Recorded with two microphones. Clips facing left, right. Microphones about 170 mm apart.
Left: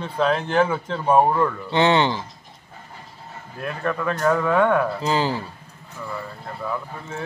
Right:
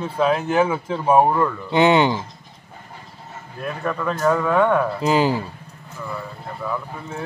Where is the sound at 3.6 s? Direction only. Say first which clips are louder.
Even; centre (ahead or behind).